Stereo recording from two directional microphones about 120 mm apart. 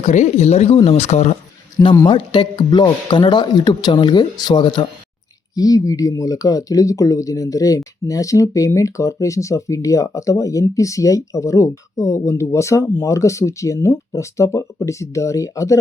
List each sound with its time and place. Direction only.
0.0 s speech: 80° left
2.0 s speech: 40° left (ahead or behind)